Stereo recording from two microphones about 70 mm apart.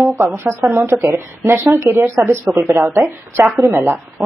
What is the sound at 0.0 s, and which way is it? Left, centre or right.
A woman's voice, right.